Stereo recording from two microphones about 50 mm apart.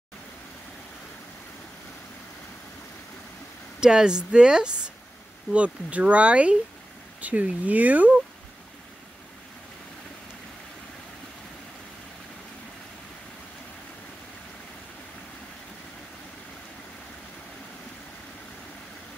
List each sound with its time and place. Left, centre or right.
3.8 s speech: centre
5.5 s speech: right